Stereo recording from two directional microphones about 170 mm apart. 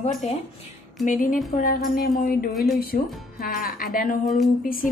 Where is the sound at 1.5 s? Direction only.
60° left (ahead or behind).